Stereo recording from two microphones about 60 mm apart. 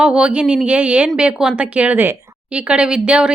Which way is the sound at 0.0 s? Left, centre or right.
Centre.